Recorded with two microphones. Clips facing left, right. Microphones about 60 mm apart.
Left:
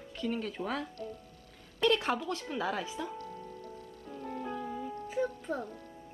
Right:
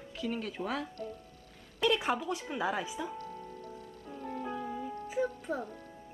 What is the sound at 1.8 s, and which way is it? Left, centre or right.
A woman's voice, centre.